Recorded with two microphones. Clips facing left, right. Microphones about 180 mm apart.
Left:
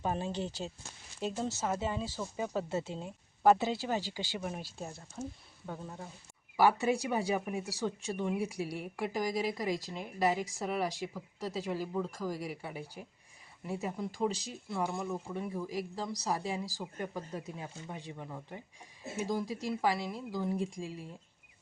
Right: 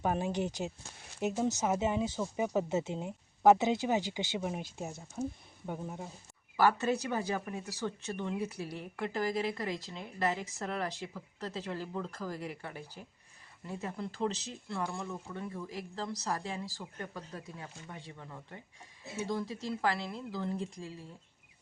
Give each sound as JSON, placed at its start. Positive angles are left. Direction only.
{"t": 0.0, "sound": "speech", "side_deg": -15}
{"t": 6.6, "sound": "speech", "side_deg": 10}